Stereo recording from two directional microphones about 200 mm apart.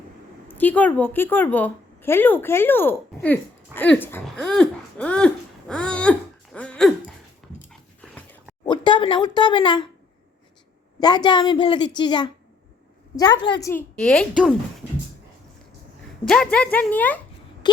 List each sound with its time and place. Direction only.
0.4 s a woman's voice: 10° left (ahead or behind)
7.7 s dog: 5° left (ahead or behind)
8.6 s a woman's voice: 25° left (ahead or behind)
11.0 s a woman's voice: 20° left (ahead or behind); by 14.5 s centre (ahead or behind)
16.2 s a woman's voice: 5° left (ahead or behind)